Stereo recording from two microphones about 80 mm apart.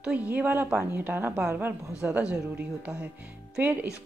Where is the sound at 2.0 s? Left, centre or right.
Centre.